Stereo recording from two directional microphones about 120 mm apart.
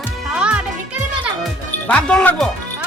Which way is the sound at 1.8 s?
10° left (ahead or behind).